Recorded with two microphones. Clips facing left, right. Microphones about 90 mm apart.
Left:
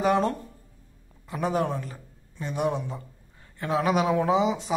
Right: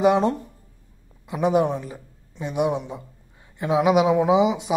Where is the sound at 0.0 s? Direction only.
20° right (ahead or behind).